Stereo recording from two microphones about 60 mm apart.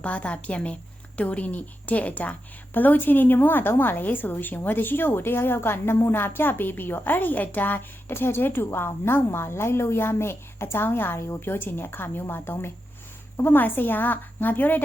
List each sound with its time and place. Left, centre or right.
0.0 s a woman's voice: left